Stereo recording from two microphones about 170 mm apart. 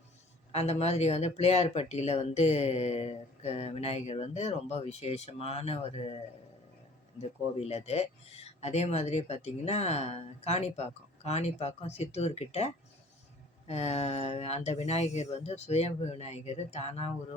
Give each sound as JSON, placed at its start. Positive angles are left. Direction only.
{"t": 0.5, "sound": "speech", "side_deg": 40}
{"t": 7.2, "sound": "speech", "side_deg": 40}